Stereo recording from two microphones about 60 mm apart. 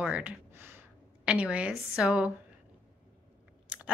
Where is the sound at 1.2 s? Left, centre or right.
Centre.